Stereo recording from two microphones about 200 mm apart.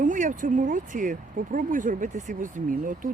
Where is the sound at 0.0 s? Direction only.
40° right (ahead or behind).